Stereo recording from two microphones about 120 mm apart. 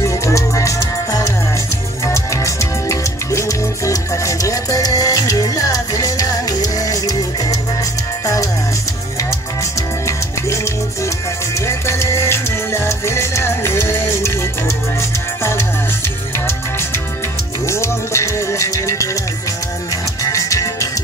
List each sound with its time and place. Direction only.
0.0 s music: 25° left (ahead or behind)
10.0 s music: 25° left (ahead or behind)
17.6 s music: 25° left (ahead or behind)
20.2 s music: 25° left (ahead or behind)